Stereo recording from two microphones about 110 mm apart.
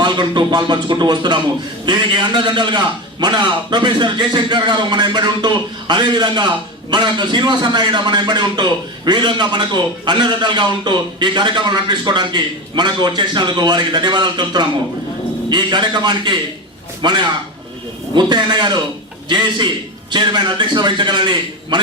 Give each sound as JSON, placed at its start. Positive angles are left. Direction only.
{"t": 0.0, "sound": "a man's voice", "side_deg": -40}